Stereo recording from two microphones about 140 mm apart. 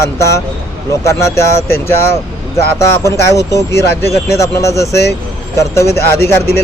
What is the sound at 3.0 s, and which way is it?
Speech, 20° left (ahead or behind).